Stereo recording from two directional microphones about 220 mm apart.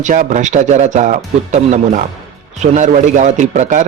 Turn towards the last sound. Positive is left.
turn(degrees=-35)  # may be behind; listen again after turning